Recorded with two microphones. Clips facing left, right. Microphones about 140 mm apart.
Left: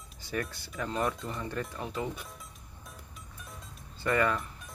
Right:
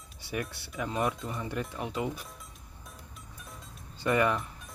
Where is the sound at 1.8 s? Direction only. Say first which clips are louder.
Right 3 dB; 20° right (ahead or behind).